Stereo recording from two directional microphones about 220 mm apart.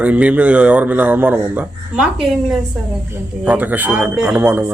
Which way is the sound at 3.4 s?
5° right (ahead or behind).